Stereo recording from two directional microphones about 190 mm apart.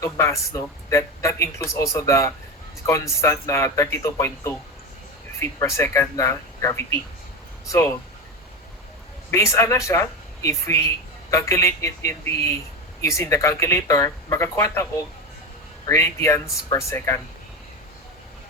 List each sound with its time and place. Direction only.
0.0 s speech: 15° left (ahead or behind)
9.3 s speech: 15° left (ahead or behind)